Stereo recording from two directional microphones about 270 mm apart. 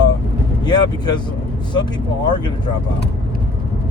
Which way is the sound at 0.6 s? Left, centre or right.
Centre.